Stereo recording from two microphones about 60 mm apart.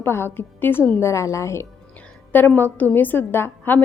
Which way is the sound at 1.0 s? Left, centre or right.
Left.